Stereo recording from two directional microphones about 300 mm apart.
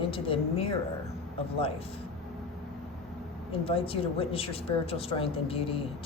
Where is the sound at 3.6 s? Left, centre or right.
Centre.